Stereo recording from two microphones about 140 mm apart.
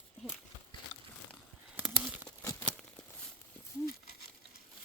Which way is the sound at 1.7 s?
10° right (ahead or behind).